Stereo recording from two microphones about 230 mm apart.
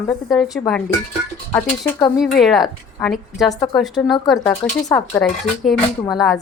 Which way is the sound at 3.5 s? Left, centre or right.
Centre.